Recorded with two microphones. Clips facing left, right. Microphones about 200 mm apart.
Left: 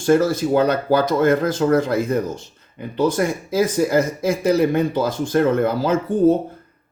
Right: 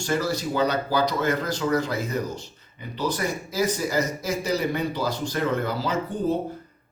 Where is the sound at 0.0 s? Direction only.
50° left (ahead or behind).